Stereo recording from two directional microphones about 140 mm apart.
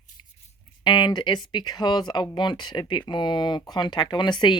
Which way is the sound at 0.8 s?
35° left (ahead or behind).